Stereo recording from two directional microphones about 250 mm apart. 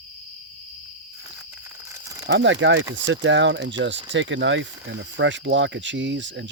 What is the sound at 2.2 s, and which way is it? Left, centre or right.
Speech, right.